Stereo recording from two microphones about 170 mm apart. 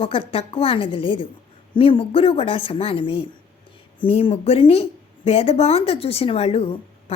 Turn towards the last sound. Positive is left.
turn(degrees=35)  # may be behind; listen again after turning